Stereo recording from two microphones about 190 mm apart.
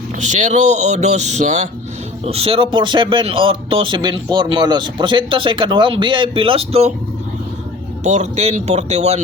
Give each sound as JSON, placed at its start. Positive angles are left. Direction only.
{"t": 0.2, "sound": "a man's voice", "side_deg": -40}
{"t": 8.0, "sound": "speech", "side_deg": -35}